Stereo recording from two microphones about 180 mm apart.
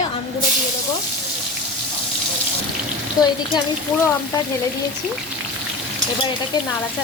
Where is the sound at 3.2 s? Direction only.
20° left (ahead or behind).